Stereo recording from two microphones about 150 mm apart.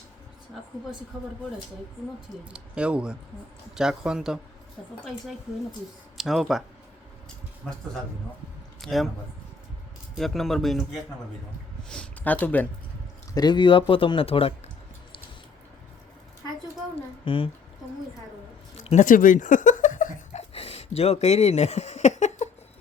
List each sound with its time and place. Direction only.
2.4 s speech: 5° right (ahead or behind)
6.1 s speech: centre (ahead or behind)
7.6 s speech: centre (ahead or behind)
10.2 s speech: centre (ahead or behind)
13.3 s speech: 30° left (ahead or behind)
17.2 s speech: 35° left (ahead or behind)
18.9 s a sound: 60° left (ahead or behind)